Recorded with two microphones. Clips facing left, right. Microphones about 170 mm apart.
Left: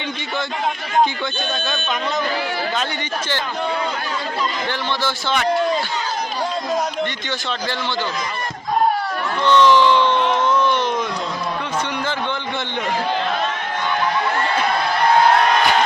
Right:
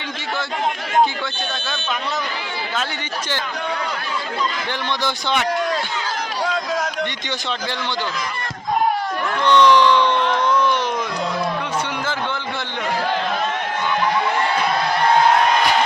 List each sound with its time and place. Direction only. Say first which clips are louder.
5.0 s speech: right 1 dB; 15° right (ahead or behind)
9.5 s speech: even; 20° right (ahead or behind)